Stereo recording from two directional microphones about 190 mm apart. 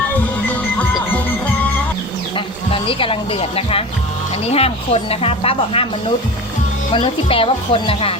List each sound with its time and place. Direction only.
2.7 s speech: 30° left (ahead or behind)
6.9 s speech: 30° left (ahead or behind)